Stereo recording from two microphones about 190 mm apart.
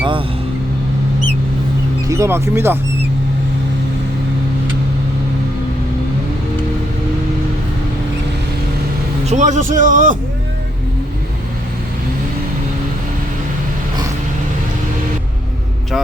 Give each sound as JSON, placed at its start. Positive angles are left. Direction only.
{"t": 2.0, "sound": "speech", "side_deg": -15}
{"t": 9.3, "sound": "a man's voice", "side_deg": -40}